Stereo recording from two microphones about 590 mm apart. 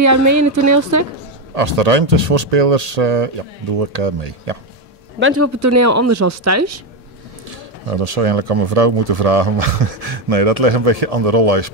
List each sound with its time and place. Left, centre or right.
0.0 s speech: right
1.5 s speech: right
5.2 s speech: right
7.4 s speech: right